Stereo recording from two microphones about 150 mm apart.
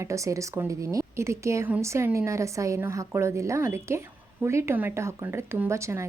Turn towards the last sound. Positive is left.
turn(degrees=-20)  # may be behind; listen again after turning